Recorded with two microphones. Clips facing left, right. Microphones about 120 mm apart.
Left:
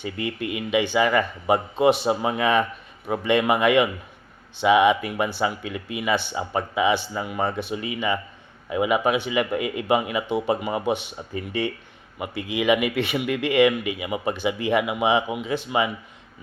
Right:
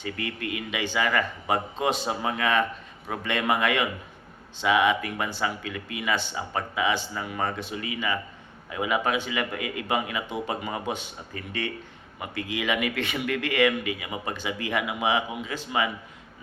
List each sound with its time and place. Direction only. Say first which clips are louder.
0.0 s speech: left 4 dB; 15° left (ahead or behind)